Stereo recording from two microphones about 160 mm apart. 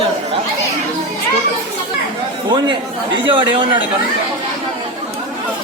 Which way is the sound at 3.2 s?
30° right (ahead or behind).